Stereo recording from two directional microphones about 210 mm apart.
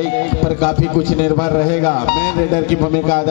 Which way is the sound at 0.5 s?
20° left (ahead or behind).